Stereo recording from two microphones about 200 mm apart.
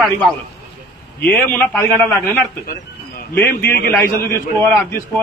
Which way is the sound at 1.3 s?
10° left (ahead or behind).